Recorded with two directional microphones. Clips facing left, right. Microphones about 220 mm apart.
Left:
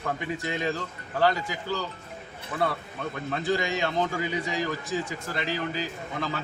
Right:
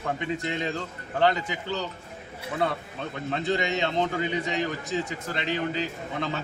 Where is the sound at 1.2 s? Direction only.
20° right (ahead or behind).